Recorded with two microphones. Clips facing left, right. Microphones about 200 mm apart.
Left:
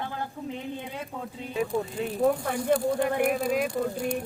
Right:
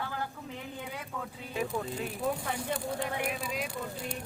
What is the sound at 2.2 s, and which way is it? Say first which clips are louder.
Speech: left 10 dB; 55° left (ahead or behind).